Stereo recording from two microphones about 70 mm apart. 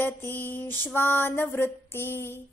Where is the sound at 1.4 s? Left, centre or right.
Left.